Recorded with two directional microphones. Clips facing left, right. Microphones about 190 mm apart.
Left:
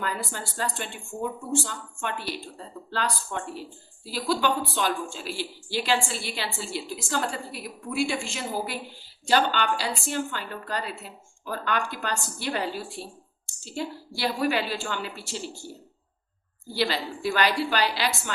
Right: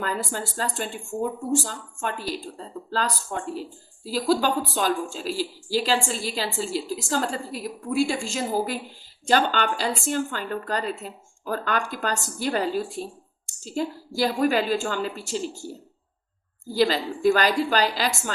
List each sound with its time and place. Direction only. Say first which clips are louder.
0.0 s a woman's voice: right 4 dB; 45° right (ahead or behind)
16.6 s a woman's voice: right 5 dB; 40° right (ahead or behind)